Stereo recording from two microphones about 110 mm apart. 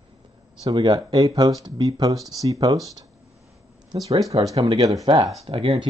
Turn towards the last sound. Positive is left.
turn(degrees=-65)  # may be behind; listen again after turning